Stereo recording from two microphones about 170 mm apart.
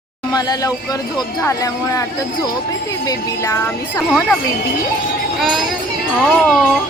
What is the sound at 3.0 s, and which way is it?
Music, 20° left (ahead or behind).